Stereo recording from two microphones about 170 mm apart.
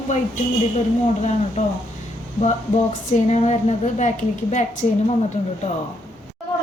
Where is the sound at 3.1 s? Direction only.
40° left (ahead or behind).